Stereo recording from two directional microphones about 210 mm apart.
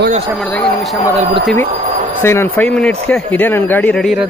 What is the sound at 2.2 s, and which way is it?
A man's voice, 10° left (ahead or behind).